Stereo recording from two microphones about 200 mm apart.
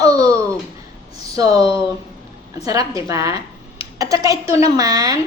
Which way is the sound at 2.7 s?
15° right (ahead or behind).